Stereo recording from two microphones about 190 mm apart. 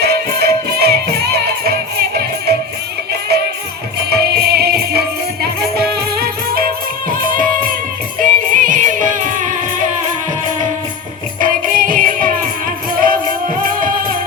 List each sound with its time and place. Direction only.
0.0 s music: 55° right (ahead or behind)
11.3 s music: 45° right (ahead or behind)
13.6 s music: 45° right (ahead or behind)